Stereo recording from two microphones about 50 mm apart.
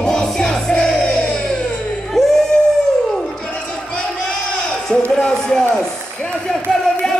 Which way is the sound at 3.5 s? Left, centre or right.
Left.